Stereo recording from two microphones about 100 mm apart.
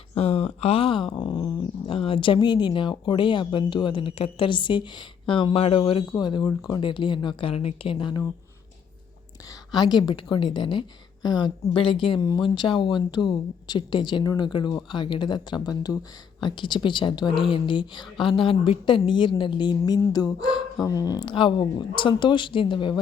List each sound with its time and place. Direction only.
0.1 s speech: 70° left (ahead or behind); by 1.5 s 45° left (ahead or behind)
1.9 s speech: 65° left (ahead or behind)
6.1 s a woman's voice: 50° left (ahead or behind)
9.7 s a woman's voice: 45° left (ahead or behind)